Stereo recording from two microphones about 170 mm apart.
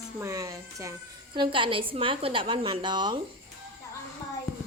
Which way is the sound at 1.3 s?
30° right (ahead or behind).